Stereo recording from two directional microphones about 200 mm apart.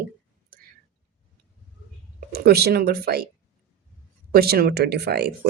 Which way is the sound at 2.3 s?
50° right (ahead or behind).